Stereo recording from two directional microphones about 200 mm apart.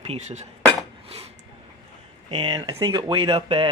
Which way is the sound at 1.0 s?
30° right (ahead or behind).